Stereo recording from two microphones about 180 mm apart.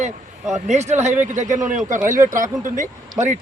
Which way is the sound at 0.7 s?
40° right (ahead or behind).